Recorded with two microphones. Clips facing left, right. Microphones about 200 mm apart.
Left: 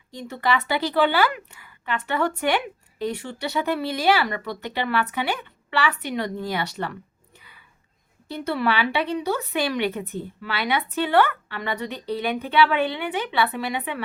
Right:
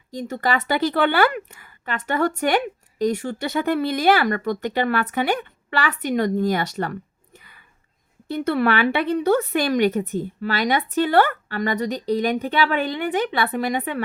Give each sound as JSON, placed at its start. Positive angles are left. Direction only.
{"t": 0.1, "sound": "speech", "side_deg": -45}
{"t": 8.3, "sound": "speech", "side_deg": -55}